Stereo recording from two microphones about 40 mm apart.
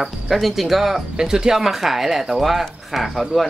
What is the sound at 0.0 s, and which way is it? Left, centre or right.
Speech, centre.